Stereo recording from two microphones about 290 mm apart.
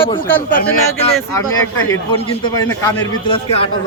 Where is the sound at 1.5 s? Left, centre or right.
Left.